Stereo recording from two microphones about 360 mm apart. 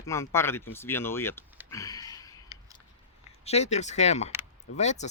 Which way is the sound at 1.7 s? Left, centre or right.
Centre.